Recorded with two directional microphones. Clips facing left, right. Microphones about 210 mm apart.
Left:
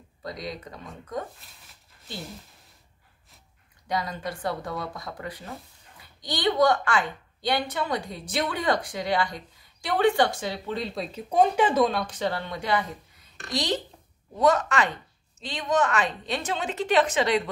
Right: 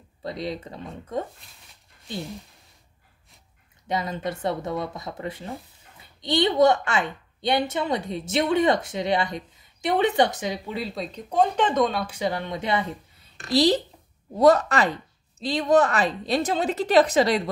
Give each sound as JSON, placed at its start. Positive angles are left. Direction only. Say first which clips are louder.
{"t": 0.2, "sound": "a woman's voice", "louder": "right 5 dB", "side_deg": -25}
{"t": 1.4, "sound": "speech", "louder": "even", "side_deg": 0}
{"t": 3.8, "sound": "a woman's voice", "louder": "right 3 dB", "side_deg": -25}